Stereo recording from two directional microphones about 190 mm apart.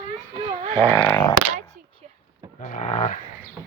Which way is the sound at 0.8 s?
15° left (ahead or behind).